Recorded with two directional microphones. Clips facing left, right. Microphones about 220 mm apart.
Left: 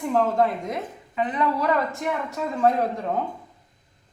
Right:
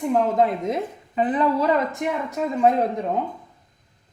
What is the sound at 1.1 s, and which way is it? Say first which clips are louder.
Speech: right 4 dB; 35° right (ahead or behind).